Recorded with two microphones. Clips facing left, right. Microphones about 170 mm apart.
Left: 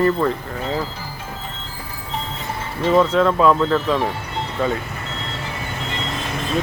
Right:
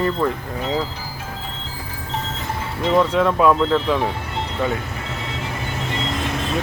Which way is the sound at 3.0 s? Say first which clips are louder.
Even; 10° right (ahead or behind).